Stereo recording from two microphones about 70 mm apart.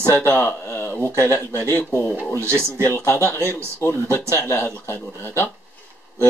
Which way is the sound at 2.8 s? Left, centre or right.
Left.